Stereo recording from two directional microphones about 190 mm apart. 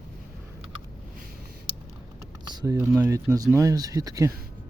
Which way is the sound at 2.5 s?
15° right (ahead or behind).